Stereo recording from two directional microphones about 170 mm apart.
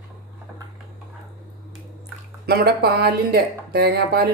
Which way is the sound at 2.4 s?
70° right (ahead or behind).